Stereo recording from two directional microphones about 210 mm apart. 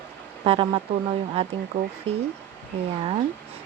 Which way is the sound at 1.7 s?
40° right (ahead or behind).